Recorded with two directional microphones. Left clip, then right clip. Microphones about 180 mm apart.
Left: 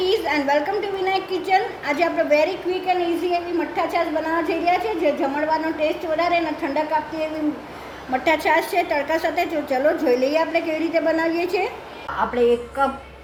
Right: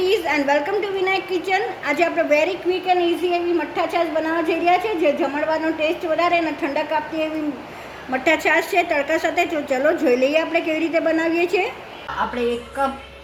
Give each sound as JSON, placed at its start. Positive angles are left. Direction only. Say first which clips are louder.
{"t": 0.0, "sound": "a woman's voice", "louder": "right 1 dB", "side_deg": -40}